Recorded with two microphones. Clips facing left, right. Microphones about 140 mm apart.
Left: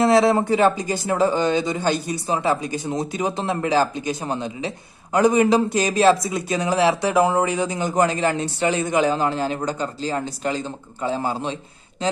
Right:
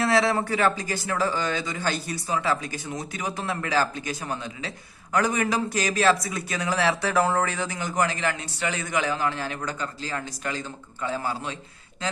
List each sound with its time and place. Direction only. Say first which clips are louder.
0.0 s speech: left 6 dB; 25° left (ahead or behind)